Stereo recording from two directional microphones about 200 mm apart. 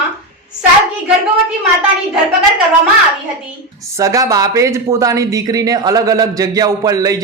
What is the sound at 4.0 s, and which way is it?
Speech, 15° right (ahead or behind).